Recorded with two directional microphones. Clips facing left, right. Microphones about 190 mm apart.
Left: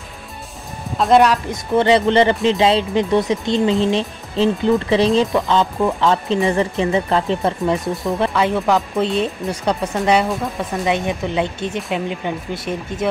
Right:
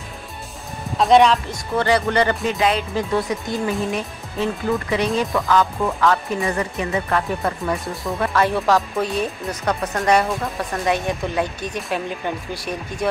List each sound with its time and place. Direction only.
0.9 s speech: centre (ahead or behind)
1.8 s speech: 20° left (ahead or behind)
9.5 s speech: 10° left (ahead or behind)
10.9 s speech: 20° left (ahead or behind)